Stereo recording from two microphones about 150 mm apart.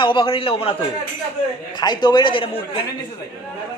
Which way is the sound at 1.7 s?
30° left (ahead or behind).